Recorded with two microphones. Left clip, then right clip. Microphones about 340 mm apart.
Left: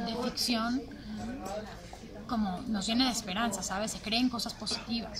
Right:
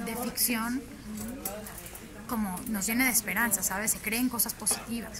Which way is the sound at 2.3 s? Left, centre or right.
Centre.